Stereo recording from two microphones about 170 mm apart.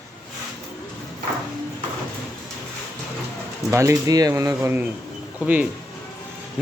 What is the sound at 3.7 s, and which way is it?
Speech, 15° right (ahead or behind).